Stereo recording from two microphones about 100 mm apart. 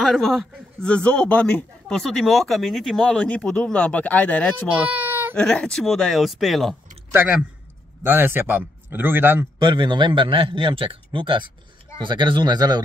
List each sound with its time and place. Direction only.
0.0 s a man's voice: 5° left (ahead or behind)
4.8 s baby cry: 15° right (ahead or behind)
5.3 s speech: 10° left (ahead or behind)
7.1 s a man's voice: 20° right (ahead or behind)
9.6 s a man's voice: 50° right (ahead or behind)